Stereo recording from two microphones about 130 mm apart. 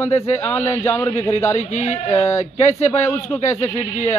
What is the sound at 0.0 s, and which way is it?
Speech, 55° left (ahead or behind).